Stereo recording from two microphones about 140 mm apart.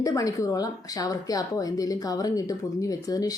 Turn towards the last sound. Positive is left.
turn(degrees=25)  # may be behind; listen again after turning